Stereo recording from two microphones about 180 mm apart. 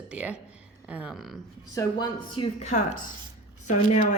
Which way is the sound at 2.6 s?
40° left (ahead or behind).